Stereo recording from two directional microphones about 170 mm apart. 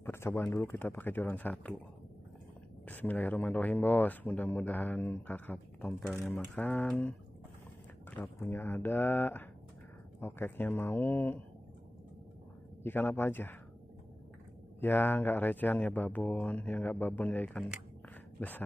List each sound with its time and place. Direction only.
0.0 s speech: 15° left (ahead or behind)
2.8 s speech: 10° left (ahead or behind)
8.2 s speech: 15° left (ahead or behind)
12.8 s speech: 10° left (ahead or behind)
14.8 s speech: 10° left (ahead or behind)